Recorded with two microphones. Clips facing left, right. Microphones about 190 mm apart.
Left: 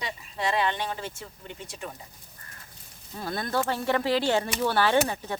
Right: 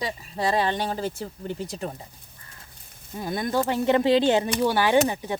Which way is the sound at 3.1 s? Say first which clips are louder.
Right 3 dB; 15° right (ahead or behind).